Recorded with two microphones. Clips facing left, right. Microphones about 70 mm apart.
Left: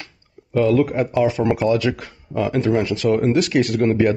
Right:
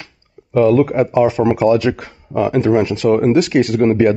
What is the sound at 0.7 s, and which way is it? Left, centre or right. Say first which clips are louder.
Speech: right 5 dB; centre.